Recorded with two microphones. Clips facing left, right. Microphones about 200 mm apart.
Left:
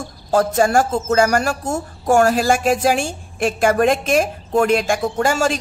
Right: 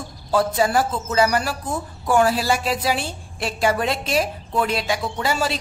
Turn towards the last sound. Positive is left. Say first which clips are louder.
# left 5 dB
turn(degrees=45)  # may be behind; listen again after turning